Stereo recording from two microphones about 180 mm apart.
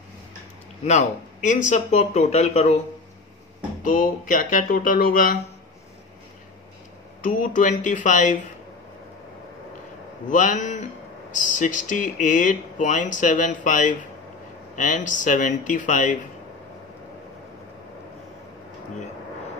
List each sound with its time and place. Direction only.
0.8 s speech: 40° left (ahead or behind)
3.8 s speech: 50° left (ahead or behind)
7.2 s speech: 45° left (ahead or behind)
10.3 s speech: 45° left (ahead or behind)